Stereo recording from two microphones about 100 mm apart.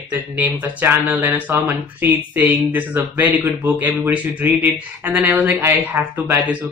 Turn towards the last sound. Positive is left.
turn(degrees=-25)  # may be behind; listen again after turning